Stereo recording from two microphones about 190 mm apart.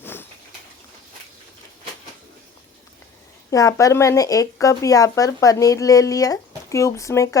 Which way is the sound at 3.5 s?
15° left (ahead or behind).